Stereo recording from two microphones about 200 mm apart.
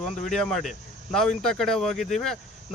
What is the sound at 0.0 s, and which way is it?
Speech, 5° left (ahead or behind).